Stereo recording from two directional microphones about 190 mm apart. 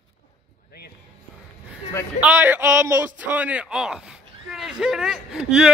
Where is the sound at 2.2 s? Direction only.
10° right (ahead or behind).